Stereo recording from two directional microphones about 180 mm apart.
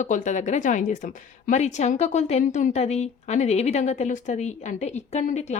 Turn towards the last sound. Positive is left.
turn(degrees=40)  # may be behind; listen again after turning